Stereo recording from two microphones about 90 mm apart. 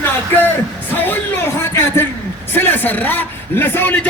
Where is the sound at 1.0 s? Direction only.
20° left (ahead or behind).